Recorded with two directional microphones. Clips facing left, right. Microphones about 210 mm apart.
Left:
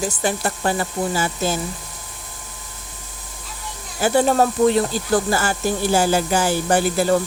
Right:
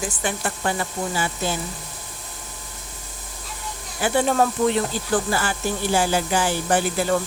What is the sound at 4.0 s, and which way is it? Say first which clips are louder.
Speech: left 3 dB; 40° left (ahead or behind).